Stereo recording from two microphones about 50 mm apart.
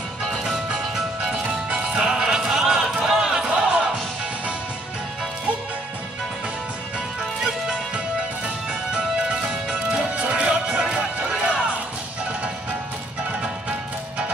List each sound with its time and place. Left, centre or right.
0.7 s music: centre
1.4 s music: right
1.9 s music: centre
8.9 s music: right